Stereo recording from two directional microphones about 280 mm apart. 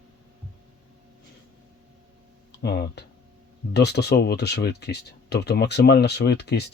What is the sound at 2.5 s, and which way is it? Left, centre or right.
Speech, left.